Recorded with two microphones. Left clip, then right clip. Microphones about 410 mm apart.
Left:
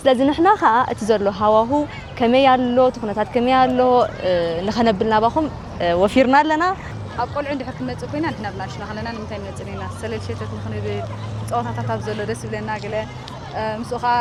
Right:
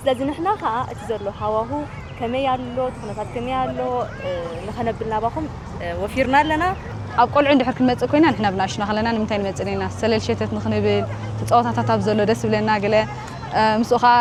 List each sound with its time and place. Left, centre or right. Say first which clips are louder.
0.0 s speech: left 6 dB; left
2.2 s speech: left 8 dB; left
7.2 s speech: right 8 dB; right
13.6 s speech: right 7 dB; right